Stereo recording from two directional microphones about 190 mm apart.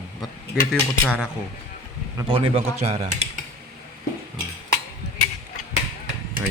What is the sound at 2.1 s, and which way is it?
Speech, 30° right (ahead or behind).